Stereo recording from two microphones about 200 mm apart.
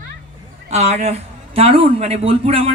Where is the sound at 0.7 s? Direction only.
35° right (ahead or behind).